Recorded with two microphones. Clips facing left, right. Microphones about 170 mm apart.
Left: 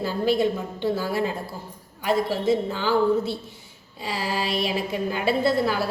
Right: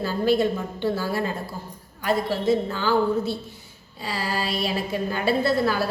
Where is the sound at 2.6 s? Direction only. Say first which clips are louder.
Left 1 dB; 15° left (ahead or behind).